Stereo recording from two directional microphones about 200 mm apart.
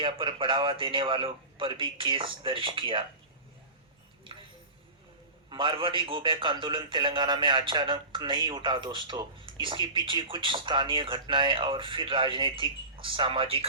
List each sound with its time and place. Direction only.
0.0 s a man's voice: 25° right (ahead or behind)
5.5 s a man's voice: 25° right (ahead or behind)